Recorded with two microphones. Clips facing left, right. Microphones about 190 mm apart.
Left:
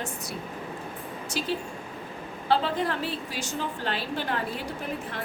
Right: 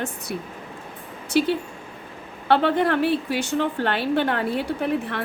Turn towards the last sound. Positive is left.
turn(degrees=-65)  # may be behind; listen again after turning